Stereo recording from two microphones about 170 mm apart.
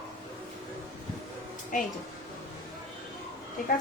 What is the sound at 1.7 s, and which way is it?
Speech, 50° left (ahead or behind).